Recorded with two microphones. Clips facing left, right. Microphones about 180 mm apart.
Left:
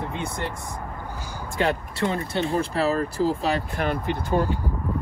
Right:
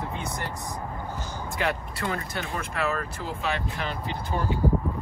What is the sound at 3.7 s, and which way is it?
Speech, 55° left (ahead or behind).